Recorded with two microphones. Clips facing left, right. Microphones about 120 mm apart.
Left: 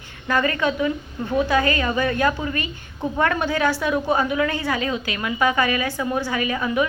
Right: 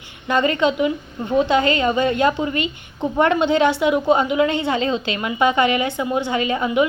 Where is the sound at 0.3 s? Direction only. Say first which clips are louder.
Right 3 dB; 20° right (ahead or behind).